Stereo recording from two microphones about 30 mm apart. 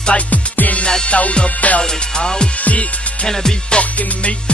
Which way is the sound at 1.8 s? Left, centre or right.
Left.